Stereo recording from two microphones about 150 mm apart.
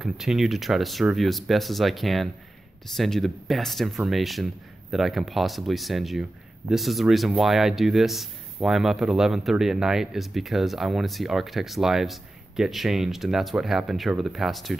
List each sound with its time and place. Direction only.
0.0 s speech: 5° right (ahead or behind)